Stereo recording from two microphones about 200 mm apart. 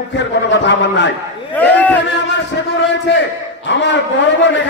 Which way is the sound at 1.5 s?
10° left (ahead or behind).